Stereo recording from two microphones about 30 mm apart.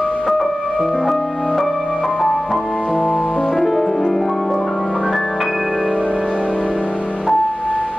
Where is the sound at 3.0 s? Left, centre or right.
Left.